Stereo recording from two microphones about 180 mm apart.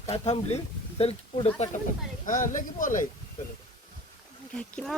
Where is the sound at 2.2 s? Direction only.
45° left (ahead or behind).